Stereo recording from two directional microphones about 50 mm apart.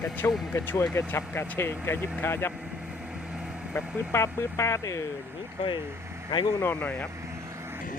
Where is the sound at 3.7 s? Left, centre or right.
Left.